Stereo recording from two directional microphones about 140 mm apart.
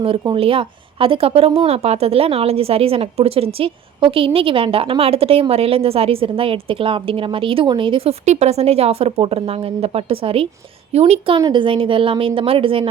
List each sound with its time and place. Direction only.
0.0 s speech: 40° right (ahead or behind)
8.2 s speech: 55° right (ahead or behind)
11.3 s speech: 30° right (ahead or behind)